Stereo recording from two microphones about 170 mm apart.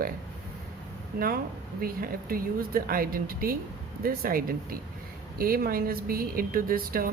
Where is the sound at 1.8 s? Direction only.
60° right (ahead or behind).